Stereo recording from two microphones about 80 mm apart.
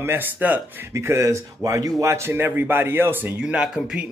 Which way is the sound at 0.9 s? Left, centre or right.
Right.